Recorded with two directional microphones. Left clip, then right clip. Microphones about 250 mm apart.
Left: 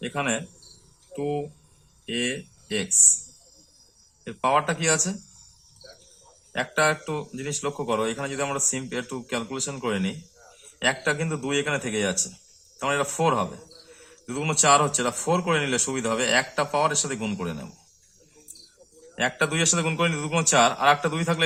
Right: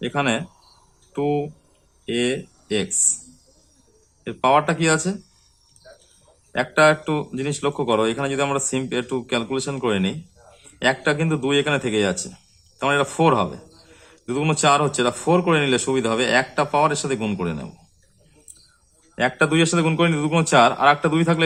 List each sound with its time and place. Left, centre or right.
0.0 s a man's voice: centre
4.2 s a man's voice: centre
6.5 s a man's voice: centre
19.1 s a man's voice: centre